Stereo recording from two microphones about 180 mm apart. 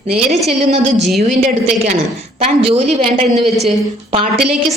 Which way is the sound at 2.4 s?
35° right (ahead or behind).